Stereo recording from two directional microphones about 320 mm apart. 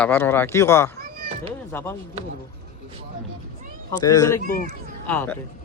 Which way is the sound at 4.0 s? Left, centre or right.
Centre.